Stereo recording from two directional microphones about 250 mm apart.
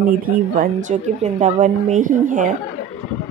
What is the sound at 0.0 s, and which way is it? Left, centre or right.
A woman's voice, right.